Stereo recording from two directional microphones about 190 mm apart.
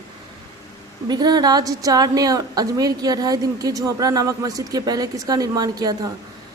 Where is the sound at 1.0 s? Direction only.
20° right (ahead or behind).